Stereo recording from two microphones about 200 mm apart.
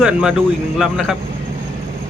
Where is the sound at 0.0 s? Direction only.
5° right (ahead or behind).